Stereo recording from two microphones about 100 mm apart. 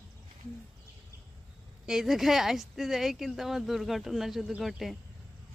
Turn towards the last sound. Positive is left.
turn(degrees=0)  # may be behind; listen again after turning